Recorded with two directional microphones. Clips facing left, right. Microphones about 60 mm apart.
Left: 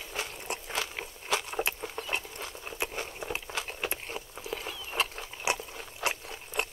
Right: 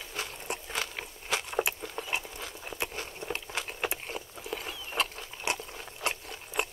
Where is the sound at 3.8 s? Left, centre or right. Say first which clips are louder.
Right 1 dB; centre.